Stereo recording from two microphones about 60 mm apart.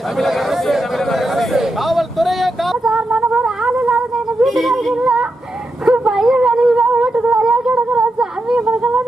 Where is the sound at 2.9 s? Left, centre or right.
Centre.